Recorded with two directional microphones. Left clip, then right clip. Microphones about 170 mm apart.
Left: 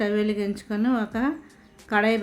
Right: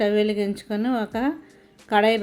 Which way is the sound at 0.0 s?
15° right (ahead or behind).